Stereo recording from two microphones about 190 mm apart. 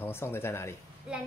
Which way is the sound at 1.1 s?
5° right (ahead or behind).